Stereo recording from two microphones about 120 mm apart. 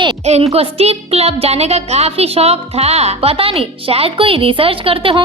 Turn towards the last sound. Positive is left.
turn(degrees=-50)  # may be behind; listen again after turning